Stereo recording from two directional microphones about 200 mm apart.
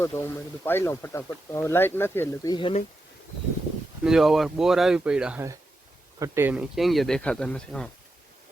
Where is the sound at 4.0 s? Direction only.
Centre (ahead or behind).